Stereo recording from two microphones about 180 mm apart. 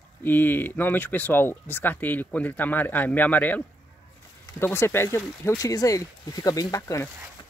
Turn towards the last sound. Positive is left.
turn(degrees=15)  # may be behind; listen again after turning